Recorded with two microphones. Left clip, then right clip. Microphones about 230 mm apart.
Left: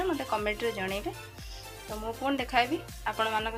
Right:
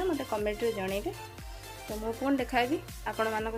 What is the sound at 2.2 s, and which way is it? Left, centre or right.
A woman's voice, right.